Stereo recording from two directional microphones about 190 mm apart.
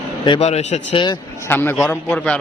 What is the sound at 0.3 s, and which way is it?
Speech, 35° left (ahead or behind).